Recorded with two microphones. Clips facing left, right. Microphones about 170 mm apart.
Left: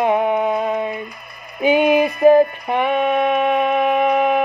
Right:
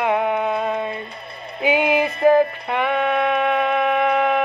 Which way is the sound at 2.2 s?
15° left (ahead or behind).